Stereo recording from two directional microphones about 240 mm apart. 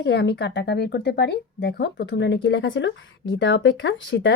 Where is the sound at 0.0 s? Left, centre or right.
Left.